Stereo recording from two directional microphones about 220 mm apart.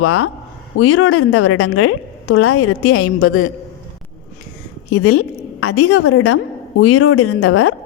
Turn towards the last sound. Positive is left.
turn(degrees=85)